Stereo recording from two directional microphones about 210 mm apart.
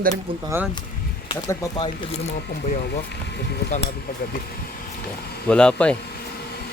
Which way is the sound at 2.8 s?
50° left (ahead or behind).